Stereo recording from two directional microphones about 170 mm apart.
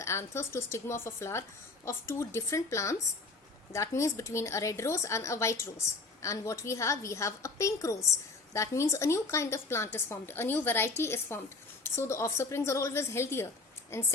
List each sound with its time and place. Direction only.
0.0 s a woman's voice: 15° left (ahead or behind)